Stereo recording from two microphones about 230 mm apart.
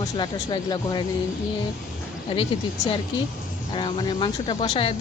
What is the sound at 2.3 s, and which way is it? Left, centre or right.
Speech, left.